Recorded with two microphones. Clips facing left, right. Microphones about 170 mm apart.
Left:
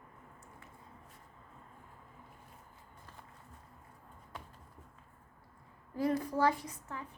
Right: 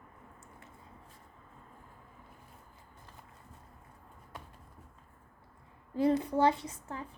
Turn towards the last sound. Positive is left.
turn(degrees=-30)  # may be behind; listen again after turning